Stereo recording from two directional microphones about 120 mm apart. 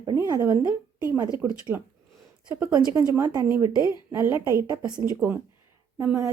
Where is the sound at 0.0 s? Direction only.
30° right (ahead or behind).